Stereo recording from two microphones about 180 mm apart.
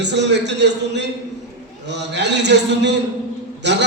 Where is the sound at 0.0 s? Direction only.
75° right (ahead or behind).